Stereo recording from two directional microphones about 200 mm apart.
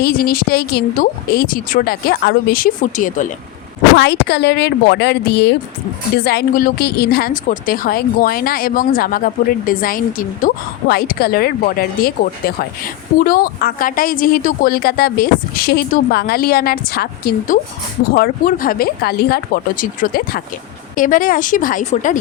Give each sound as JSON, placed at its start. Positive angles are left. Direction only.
{"t": 0.0, "sound": "a woman's voice", "side_deg": 50}
{"t": 3.9, "sound": "a woman's voice", "side_deg": 60}